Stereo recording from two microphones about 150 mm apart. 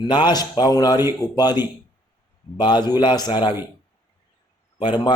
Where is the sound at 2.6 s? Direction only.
30° left (ahead or behind).